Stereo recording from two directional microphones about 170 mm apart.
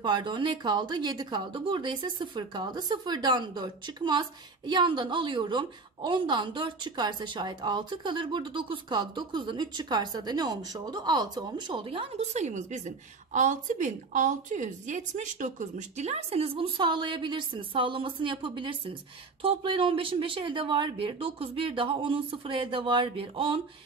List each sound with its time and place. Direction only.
0.0 s speech: 25° right (ahead or behind)